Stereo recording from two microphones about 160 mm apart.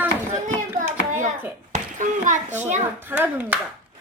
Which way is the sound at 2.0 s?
50° right (ahead or behind).